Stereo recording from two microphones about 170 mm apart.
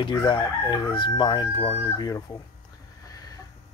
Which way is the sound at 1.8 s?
20° left (ahead or behind).